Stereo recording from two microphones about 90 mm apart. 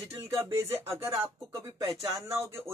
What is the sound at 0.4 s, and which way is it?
Speech, 25° right (ahead or behind).